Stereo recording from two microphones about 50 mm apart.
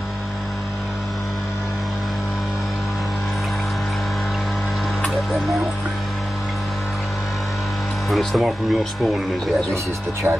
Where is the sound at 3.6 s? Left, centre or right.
Centre.